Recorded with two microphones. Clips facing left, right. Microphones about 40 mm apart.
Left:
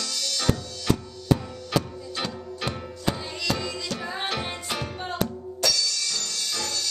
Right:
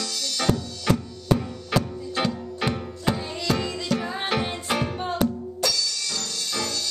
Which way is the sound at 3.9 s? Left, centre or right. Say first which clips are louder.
Right 6 dB; centre.